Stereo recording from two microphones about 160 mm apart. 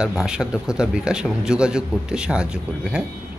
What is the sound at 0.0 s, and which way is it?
A man's voice, 5° right (ahead or behind).